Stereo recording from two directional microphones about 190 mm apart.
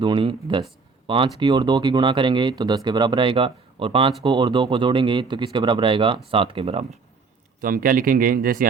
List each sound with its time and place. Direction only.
0.0 s speech: 25° right (ahead or behind)
7.6 s speech: 50° right (ahead or behind)